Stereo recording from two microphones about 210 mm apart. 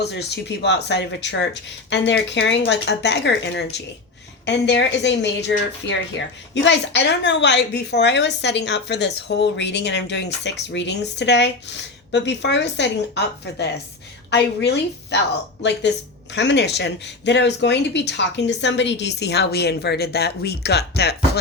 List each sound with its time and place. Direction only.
0.0 s a woman's voice: 50° left (ahead or behind)
16.3 s speech: 55° left (ahead or behind)